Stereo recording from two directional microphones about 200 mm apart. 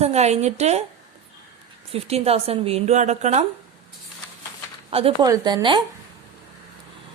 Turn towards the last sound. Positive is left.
turn(degrees=-25)  # may be behind; listen again after turning